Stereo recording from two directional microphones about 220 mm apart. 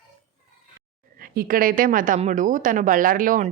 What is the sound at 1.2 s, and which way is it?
A woman's voice, 40° right (ahead or behind).